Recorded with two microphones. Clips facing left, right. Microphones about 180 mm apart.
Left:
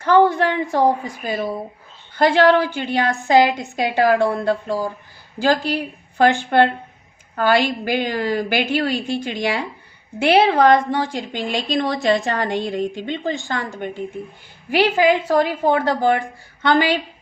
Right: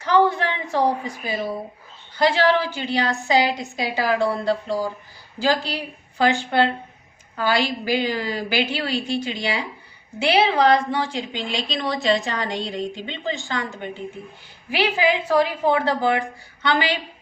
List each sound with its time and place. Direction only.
0.0 s a woman's voice: 50° left (ahead or behind)
14.7 s a woman's voice: 50° left (ahead or behind)